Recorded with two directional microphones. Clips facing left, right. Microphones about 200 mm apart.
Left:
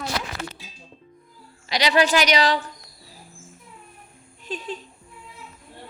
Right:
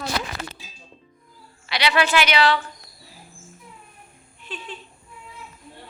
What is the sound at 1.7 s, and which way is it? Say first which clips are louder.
Speech: left 1 dB; 40° left (ahead or behind).